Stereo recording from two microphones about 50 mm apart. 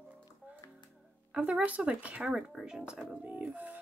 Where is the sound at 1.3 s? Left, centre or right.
Right.